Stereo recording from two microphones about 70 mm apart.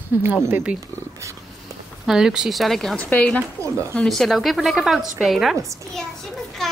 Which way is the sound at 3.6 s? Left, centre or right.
Right.